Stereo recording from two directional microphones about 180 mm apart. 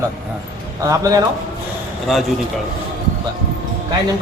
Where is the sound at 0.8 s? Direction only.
20° right (ahead or behind).